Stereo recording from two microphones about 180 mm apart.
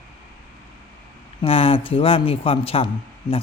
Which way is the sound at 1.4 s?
30° left (ahead or behind).